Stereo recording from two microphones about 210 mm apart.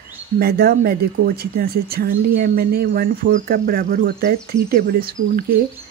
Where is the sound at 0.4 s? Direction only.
45° right (ahead or behind).